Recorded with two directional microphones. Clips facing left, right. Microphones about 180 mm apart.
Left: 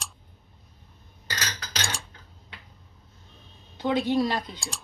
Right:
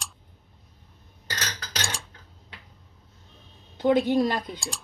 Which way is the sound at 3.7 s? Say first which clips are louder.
Right 3 dB; 50° right (ahead or behind).